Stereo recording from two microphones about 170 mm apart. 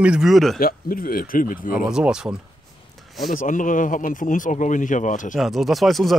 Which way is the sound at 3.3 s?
50° left (ahead or behind).